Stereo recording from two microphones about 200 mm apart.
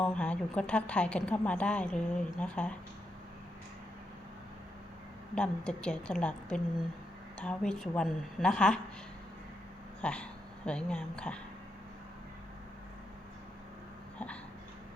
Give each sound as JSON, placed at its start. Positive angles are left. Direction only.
{"t": 0.0, "sound": "a woman's voice", "side_deg": 5}
{"t": 5.3, "sound": "a woman's voice", "side_deg": 5}
{"t": 10.0, "sound": "a woman's voice", "side_deg": 5}